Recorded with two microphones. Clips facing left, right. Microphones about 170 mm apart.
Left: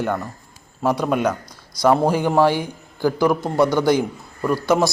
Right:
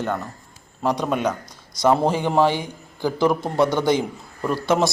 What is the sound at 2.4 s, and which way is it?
Speech, 20° right (ahead or behind).